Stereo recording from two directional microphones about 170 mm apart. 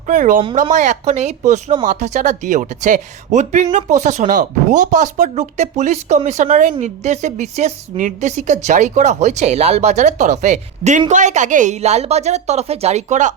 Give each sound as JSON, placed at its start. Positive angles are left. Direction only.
{"t": 0.1, "sound": "a woman's voice", "side_deg": -50}